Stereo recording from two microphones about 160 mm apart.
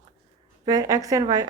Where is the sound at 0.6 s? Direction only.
25° right (ahead or behind).